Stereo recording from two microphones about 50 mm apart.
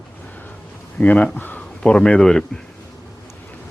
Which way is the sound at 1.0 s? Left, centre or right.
Left.